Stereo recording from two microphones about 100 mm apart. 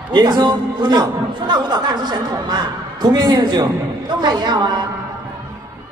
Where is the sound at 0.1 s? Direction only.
45° right (ahead or behind).